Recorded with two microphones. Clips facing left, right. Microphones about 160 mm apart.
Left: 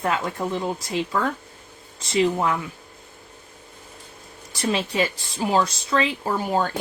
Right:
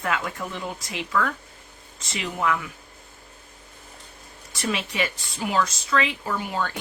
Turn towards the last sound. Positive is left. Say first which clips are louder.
# left 5 dB
turn(degrees=40)  # may be behind; listen again after turning